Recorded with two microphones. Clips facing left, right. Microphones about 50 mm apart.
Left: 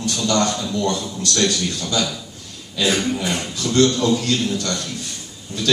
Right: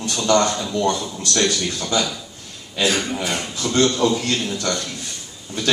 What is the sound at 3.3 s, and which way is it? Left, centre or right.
A man's voice, centre.